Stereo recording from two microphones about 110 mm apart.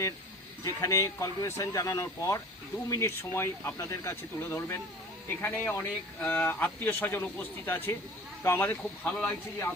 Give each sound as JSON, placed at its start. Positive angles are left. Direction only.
{"t": 0.6, "sound": "speech", "side_deg": 30}
{"t": 9.0, "sound": "speech", "side_deg": 10}